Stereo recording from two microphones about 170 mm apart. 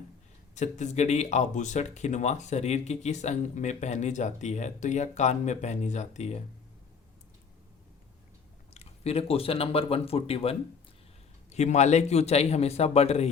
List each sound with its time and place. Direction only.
0.5 s speech: 45° left (ahead or behind)
8.7 s a man's voice: 35° left (ahead or behind)